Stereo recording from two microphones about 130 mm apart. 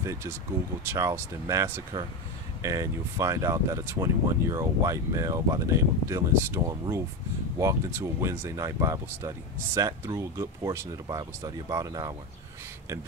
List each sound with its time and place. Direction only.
0.0 s speech: 25° right (ahead or behind)